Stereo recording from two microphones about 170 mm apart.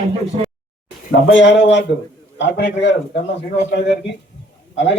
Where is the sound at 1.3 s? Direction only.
90° left.